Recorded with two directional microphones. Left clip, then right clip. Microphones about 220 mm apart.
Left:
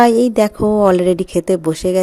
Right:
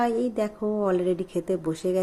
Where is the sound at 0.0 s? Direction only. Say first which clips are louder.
Left 14 dB; 50° left (ahead or behind).